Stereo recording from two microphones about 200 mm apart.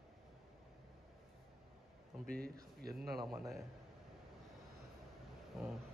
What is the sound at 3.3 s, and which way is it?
Speech, centre (ahead or behind).